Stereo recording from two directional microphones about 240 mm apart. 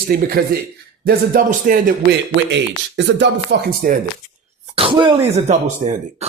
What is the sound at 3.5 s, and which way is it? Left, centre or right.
Speech, right.